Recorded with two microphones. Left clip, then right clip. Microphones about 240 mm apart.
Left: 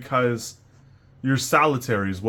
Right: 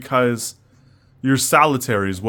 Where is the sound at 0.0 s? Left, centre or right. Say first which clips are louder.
Right 4 dB; right.